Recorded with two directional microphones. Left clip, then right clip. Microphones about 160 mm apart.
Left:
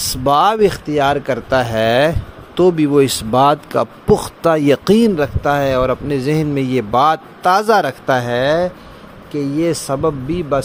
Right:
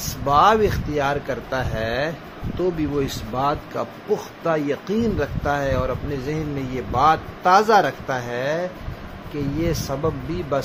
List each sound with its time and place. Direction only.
0.2 s speech: 80° left
2.6 s speech: 90° left; by 10.6 s 50° left (ahead or behind)